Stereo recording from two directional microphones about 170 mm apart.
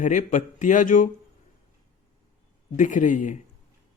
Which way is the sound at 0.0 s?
50° left (ahead or behind).